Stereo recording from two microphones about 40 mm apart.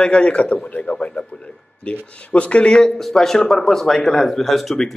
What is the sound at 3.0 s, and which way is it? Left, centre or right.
Speech, centre.